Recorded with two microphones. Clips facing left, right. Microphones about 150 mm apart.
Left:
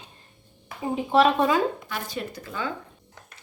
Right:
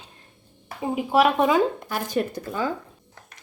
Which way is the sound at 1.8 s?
45° right (ahead or behind).